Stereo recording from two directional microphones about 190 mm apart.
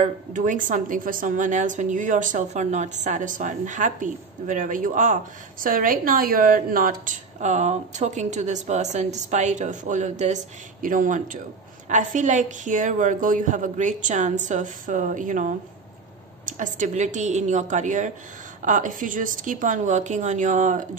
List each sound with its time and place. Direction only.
0.0 s a woman's voice: 40° right (ahead or behind)